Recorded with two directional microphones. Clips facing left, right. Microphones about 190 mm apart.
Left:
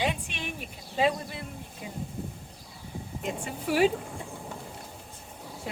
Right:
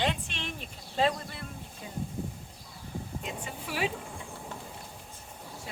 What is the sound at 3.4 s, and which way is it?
Speech, 50° left (ahead or behind).